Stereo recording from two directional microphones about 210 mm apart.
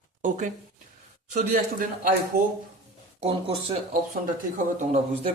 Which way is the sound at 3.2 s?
30° right (ahead or behind).